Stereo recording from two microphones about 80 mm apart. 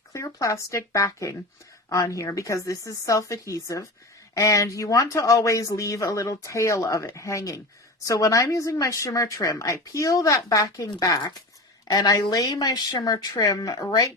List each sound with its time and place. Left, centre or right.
0.1 s speech: left